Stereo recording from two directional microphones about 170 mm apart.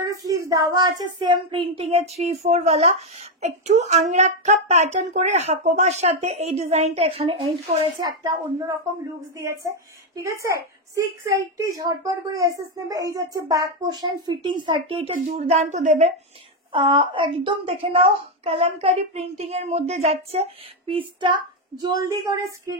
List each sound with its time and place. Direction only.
0.0 s a woman's voice: 20° right (ahead or behind)
15.1 s speech: 50° right (ahead or behind)
15.4 s a woman's voice: 40° right (ahead or behind)
16.7 s a woman's voice: 30° right (ahead or behind)